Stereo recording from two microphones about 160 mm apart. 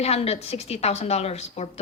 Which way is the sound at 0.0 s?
40° left (ahead or behind).